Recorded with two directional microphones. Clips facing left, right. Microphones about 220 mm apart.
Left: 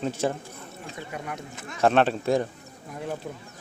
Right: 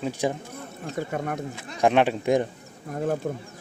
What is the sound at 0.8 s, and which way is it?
Speech, 45° right (ahead or behind).